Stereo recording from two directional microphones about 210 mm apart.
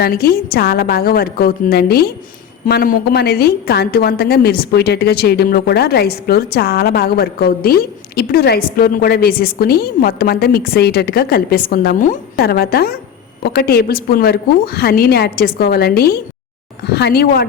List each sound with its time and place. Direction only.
0.0 s a woman's voice: 45° left (ahead or behind)